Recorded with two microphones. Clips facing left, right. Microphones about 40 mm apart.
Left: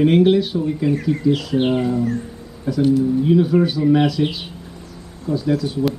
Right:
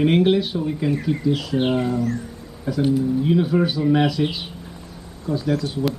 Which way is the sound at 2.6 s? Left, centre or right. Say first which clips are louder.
Left 3 dB; centre.